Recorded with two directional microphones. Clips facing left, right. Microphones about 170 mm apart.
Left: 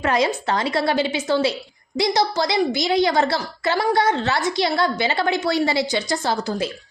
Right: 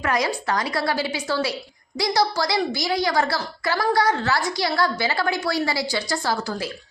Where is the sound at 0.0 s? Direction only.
25° left (ahead or behind).